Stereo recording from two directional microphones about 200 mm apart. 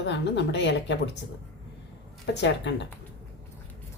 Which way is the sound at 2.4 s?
60° left (ahead or behind).